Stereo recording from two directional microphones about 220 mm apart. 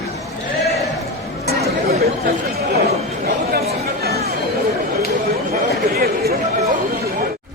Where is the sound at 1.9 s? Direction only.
45° right (ahead or behind).